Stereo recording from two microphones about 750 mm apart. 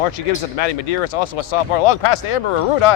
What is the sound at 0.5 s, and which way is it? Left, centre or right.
Speech, left.